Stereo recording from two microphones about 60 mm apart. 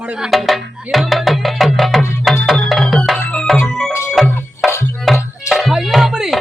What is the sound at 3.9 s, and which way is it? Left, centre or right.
Music, left.